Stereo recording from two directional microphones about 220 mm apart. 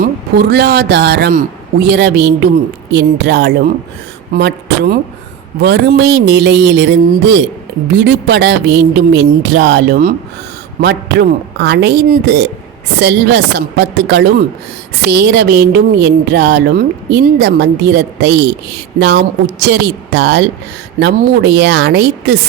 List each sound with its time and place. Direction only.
0.0 s speech: 45° right (ahead or behind)